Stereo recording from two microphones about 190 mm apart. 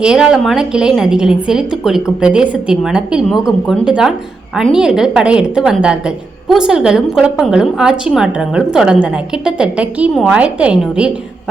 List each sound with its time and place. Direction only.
0.0 s a woman's voice: 5° right (ahead or behind)